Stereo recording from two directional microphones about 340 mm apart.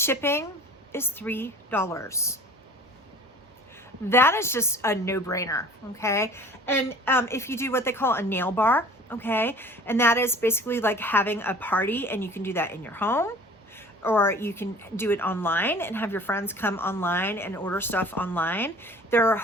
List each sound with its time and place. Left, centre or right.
0.0 s a woman's voice: centre
4.1 s a woman's voice: centre